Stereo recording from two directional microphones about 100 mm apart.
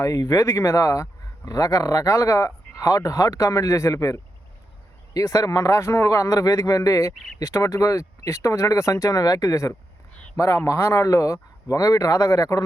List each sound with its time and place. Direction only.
0.0 s speech: 35° left (ahead or behind)